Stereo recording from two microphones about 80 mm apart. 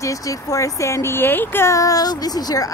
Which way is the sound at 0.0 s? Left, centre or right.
Left.